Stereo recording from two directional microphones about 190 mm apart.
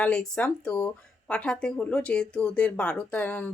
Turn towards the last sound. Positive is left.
turn(degrees=10)  # may be behind; listen again after turning